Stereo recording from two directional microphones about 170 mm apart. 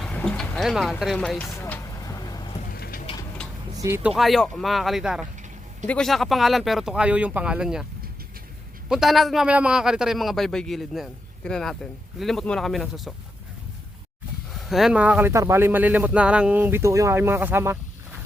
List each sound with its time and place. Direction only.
0.0 s a man's voice: 5° left (ahead or behind)
1.5 s vehicle: 15° left (ahead or behind)
2.6 s a sound: 60° left (ahead or behind)
3.8 s speech: 15° right (ahead or behind)
4.1 s a man's voice: centre (ahead or behind)
8.9 s a man's voice: centre (ahead or behind)
14.5 s speech: centre (ahead or behind)